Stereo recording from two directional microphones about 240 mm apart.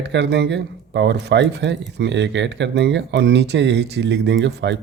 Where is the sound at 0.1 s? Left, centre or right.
Right.